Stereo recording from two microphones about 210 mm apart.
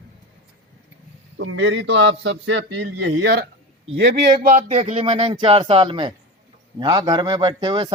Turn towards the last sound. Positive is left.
turn(degrees=-25)  # may be behind; listen again after turning